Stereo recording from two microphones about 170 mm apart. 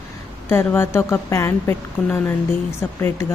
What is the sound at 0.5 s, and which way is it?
A woman's voice, 15° left (ahead or behind).